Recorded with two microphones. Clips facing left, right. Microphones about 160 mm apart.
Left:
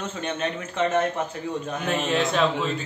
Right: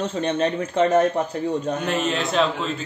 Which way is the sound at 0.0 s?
35° right (ahead or behind).